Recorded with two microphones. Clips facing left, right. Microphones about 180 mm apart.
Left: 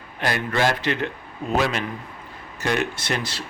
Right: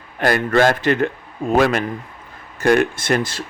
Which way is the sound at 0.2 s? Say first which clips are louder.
Right 7 dB; 50° right (ahead or behind).